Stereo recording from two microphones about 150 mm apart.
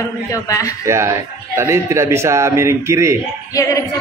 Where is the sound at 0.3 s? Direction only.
20° left (ahead or behind).